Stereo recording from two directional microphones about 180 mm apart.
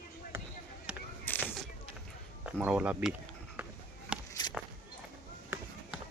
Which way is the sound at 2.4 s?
5° right (ahead or behind).